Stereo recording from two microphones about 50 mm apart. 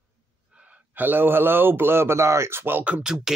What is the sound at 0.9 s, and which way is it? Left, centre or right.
A man's voice, right.